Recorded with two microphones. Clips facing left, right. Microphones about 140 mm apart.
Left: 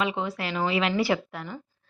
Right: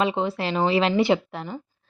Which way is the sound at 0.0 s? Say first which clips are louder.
Right 5 dB; 30° right (ahead or behind).